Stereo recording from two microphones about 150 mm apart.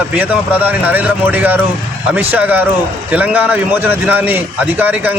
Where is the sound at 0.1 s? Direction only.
10° right (ahead or behind).